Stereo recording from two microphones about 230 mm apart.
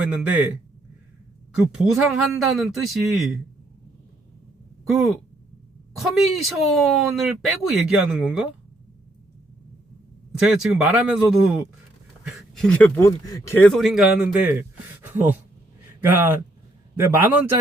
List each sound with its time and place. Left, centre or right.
0.0 s speech: centre
2.0 s speech: centre
4.9 s speech: centre
10.4 s speech: centre
13.7 s a man's voice: centre